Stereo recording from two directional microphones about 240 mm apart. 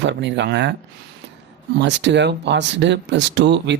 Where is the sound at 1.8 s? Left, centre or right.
Right.